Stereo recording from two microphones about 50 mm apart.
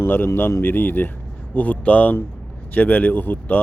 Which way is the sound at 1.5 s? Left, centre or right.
Left.